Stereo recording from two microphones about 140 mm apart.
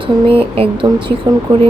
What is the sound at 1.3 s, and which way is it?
Speech, 30° right (ahead or behind).